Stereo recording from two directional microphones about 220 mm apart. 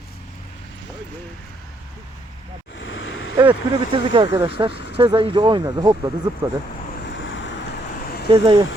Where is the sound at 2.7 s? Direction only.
60° left (ahead or behind).